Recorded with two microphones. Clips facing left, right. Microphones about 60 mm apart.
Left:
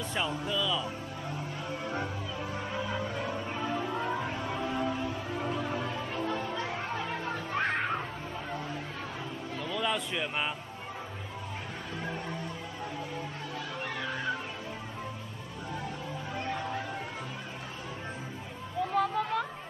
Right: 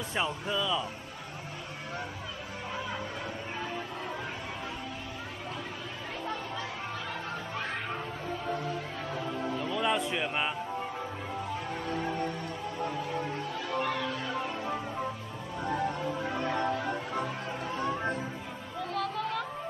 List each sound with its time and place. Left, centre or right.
0.1 s speech: centre
3.6 s music: centre
9.6 s a sound: centre
16.4 s music: right
18.9 s music: centre